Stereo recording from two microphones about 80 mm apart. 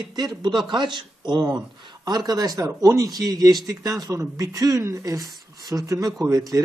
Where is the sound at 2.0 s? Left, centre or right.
Right.